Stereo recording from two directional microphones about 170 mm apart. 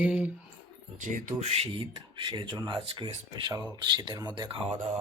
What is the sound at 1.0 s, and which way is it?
Speech, 50° right (ahead or behind).